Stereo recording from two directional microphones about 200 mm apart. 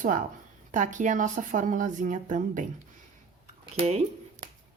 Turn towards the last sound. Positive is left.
turn(degrees=-30)  # may be behind; listen again after turning